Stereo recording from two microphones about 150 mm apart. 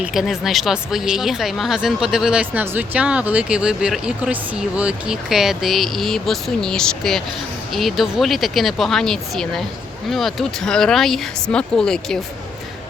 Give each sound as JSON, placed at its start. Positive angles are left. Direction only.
{"t": 0.0, "sound": "speech", "side_deg": 0}